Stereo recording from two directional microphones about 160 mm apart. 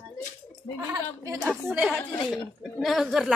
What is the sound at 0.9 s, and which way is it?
Speech, 20° right (ahead or behind).